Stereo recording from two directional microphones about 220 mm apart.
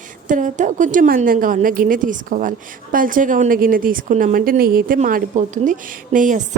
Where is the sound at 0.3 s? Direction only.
35° right (ahead or behind).